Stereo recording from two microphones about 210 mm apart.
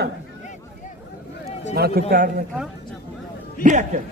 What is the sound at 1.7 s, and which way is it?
Speech, 50° right (ahead or behind).